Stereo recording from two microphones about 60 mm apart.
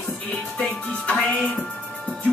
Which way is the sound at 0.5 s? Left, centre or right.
Centre.